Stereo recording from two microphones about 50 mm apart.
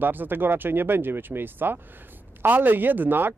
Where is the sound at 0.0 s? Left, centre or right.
Right.